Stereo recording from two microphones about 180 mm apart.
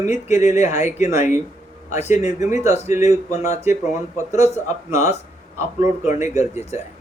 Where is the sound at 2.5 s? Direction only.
15° right (ahead or behind).